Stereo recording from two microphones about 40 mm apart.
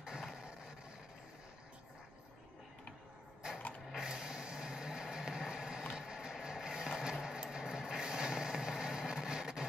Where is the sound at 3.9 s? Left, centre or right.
Centre.